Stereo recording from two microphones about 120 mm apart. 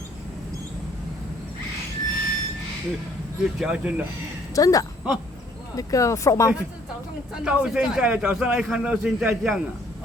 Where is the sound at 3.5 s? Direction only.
10° right (ahead or behind).